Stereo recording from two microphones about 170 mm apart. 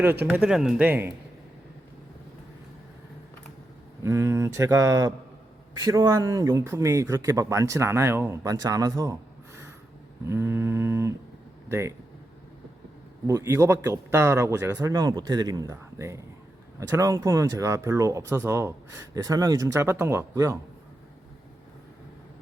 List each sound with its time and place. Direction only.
0.3 s speech: 5° right (ahead or behind)
4.0 s speech: 15° right (ahead or behind)
10.2 s speech: 15° right (ahead or behind)
13.2 s speech: 20° right (ahead or behind)